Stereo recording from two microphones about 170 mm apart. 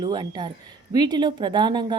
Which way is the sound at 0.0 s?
25° right (ahead or behind).